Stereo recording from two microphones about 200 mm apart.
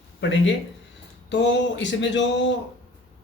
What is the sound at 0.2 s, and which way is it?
Speech, 65° left (ahead or behind).